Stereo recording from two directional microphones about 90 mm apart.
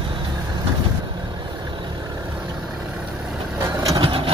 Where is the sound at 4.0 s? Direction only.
80° right.